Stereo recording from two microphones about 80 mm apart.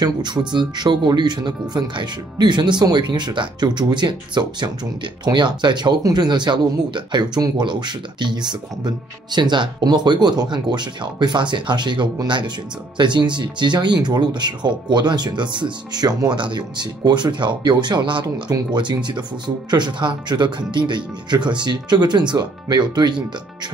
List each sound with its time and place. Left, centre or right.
0.0 s speech: right
18.2 s speech: right
19.0 s speech: right